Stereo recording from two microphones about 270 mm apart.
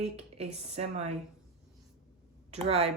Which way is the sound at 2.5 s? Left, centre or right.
Right.